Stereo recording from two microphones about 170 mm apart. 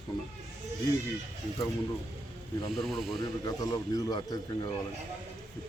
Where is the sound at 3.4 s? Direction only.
20° left (ahead or behind).